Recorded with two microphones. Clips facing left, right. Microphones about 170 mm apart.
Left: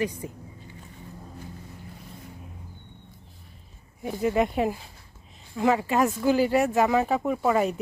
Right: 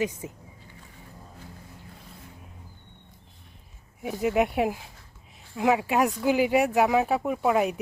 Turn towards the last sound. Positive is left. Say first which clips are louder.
# even
turn(degrees=-5)  # may be behind; listen again after turning